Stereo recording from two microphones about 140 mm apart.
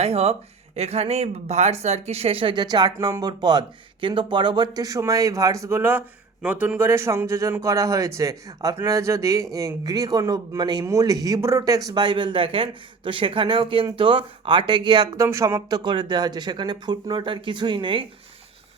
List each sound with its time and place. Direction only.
0.0 s speech: 45° right (ahead or behind); by 11.8 s 20° right (ahead or behind)
11.9 s speech: 35° right (ahead or behind)
15.8 s speech: 35° right (ahead or behind)